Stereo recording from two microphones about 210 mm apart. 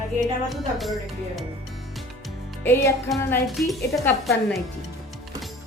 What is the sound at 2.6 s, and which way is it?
Music, 10° left (ahead or behind).